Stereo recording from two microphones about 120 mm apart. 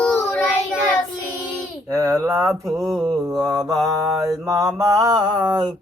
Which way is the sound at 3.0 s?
30° right (ahead or behind).